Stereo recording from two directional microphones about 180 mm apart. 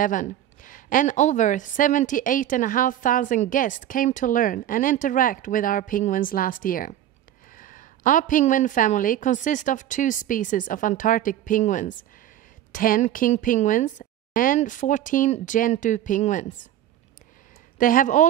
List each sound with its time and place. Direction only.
0.0 s a woman's voice: 45° left (ahead or behind)
17.7 s a woman's voice: 50° left (ahead or behind)